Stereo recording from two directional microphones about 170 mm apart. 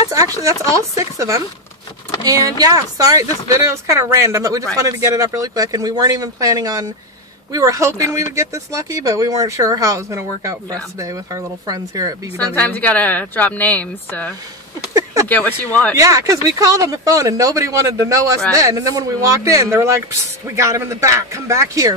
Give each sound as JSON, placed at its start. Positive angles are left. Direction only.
{"t": 0.1, "sound": "speech", "side_deg": -20}
{"t": 12.4, "sound": "a woman's voice", "side_deg": 10}
{"t": 16.0, "sound": "speech", "side_deg": -20}